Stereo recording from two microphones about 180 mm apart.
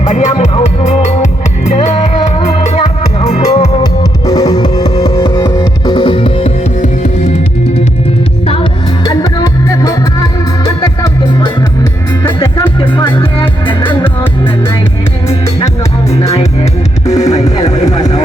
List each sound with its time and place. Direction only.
0.0 s music: 40° left (ahead or behind)
4.3 s music: 20° left (ahead or behind); by 7.3 s 40° left (ahead or behind)
9.0 s music: 20° left (ahead or behind)
13.1 s music: 30° left (ahead or behind)
13.8 s music: 10° left (ahead or behind)
16.0 s music: 15° left (ahead or behind)